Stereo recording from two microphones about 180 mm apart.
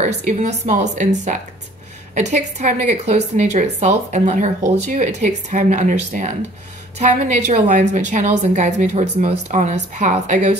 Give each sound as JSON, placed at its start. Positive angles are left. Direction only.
{"t": 0.0, "sound": "a woman's voice", "side_deg": -45}